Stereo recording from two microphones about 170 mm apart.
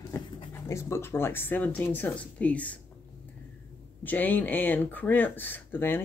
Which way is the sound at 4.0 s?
10° left (ahead or behind).